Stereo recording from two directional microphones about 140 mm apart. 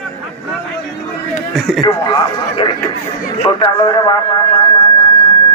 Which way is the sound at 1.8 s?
30° left (ahead or behind).